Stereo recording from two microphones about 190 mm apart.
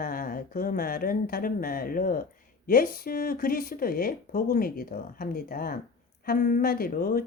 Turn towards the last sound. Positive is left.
turn(degrees=50)  # may be behind; listen again after turning